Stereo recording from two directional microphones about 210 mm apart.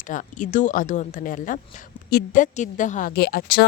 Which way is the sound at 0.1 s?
40° left (ahead or behind).